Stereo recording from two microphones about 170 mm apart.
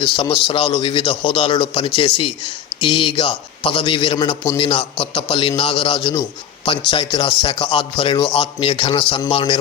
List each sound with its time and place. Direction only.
0.4 s a man's voice: 30° left (ahead or behind)